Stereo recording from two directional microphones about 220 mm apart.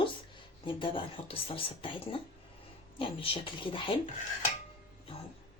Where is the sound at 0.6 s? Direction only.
20° left (ahead or behind).